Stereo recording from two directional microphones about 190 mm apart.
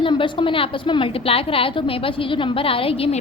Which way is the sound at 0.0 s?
25° left (ahead or behind).